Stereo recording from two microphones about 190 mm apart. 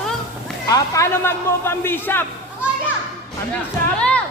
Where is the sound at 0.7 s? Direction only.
15° left (ahead or behind).